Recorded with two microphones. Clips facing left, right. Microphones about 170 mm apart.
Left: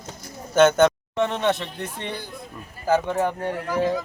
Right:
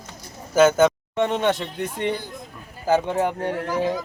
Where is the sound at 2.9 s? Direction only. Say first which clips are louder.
Right 1 dB; 20° right (ahead or behind).